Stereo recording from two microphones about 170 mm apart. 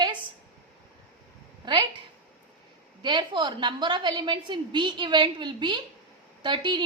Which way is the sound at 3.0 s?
25° right (ahead or behind).